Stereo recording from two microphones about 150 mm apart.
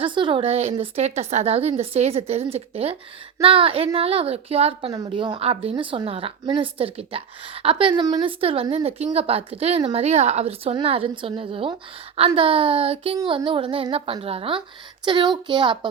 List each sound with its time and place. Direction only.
0.0 s a woman's voice: 35° right (ahead or behind)